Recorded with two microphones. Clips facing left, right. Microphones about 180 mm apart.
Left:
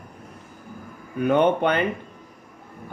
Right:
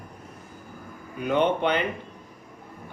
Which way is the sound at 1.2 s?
55° left (ahead or behind).